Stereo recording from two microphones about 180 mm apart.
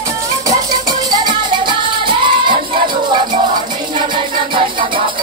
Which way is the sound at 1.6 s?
25° right (ahead or behind).